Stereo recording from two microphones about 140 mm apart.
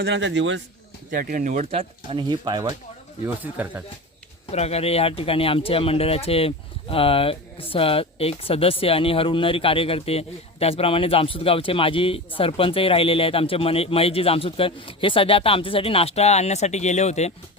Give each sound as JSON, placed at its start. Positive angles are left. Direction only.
{"t": 1.1, "sound": "speech", "side_deg": -85}
{"t": 1.7, "sound": "speech", "side_deg": -45}
{"t": 3.2, "sound": "speech", "side_deg": -15}
{"t": 4.5, "sound": "speech", "side_deg": 50}